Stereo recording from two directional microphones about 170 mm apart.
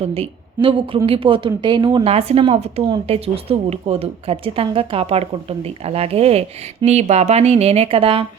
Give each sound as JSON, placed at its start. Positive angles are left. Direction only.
{"t": 0.0, "sound": "a woman's voice", "side_deg": -35}